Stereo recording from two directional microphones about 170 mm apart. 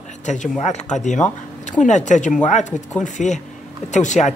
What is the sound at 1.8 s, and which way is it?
Speech, 45° left (ahead or behind).